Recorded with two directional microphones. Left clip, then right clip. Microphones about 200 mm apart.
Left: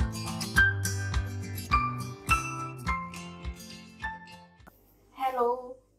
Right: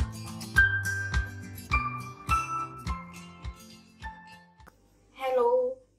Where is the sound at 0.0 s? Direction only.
Centre (ahead or behind).